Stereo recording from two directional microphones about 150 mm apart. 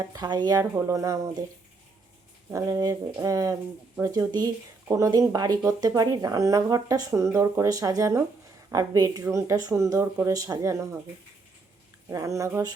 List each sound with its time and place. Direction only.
0.0 s speech: 25° right (ahead or behind)
2.5 s speech: 20° right (ahead or behind)
12.1 s speech: 20° right (ahead or behind)